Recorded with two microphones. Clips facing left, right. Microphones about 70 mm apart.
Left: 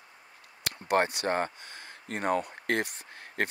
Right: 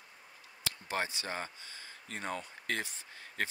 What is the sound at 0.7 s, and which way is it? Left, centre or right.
Speech, left.